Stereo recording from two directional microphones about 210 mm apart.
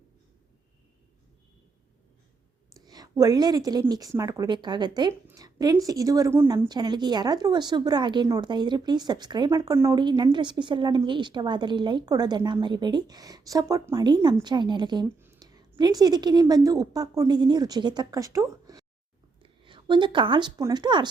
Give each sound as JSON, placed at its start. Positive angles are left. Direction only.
{"t": 2.7, "sound": "a woman's voice", "side_deg": -20}